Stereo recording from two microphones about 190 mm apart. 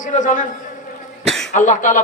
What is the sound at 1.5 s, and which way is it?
Speech, 40° left (ahead or behind).